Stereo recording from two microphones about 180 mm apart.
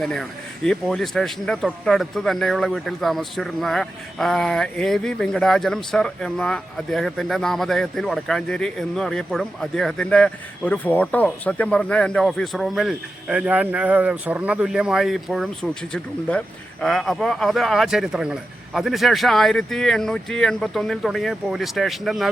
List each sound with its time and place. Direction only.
0.0 s speech: 5° left (ahead or behind)